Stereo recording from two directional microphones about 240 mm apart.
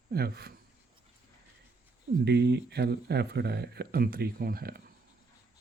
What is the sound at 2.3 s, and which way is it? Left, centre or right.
Speech, right.